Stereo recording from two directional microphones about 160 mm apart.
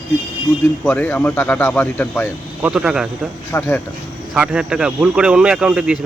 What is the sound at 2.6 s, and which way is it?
Speech, 5° right (ahead or behind).